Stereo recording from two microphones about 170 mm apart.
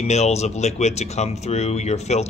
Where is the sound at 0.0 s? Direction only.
40° left (ahead or behind).